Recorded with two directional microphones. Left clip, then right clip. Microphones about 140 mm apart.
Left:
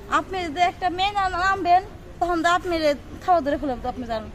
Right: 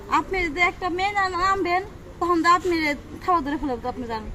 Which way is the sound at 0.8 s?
20° left (ahead or behind).